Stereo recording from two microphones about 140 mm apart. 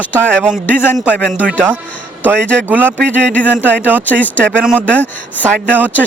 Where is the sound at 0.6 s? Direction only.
15° left (ahead or behind).